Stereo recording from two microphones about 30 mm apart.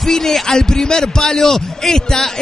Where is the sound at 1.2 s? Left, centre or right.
Centre.